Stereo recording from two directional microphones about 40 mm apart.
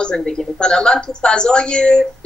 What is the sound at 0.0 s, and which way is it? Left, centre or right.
A woman's voice, centre.